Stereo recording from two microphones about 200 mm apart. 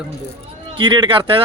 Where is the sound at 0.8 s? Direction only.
25° right (ahead or behind).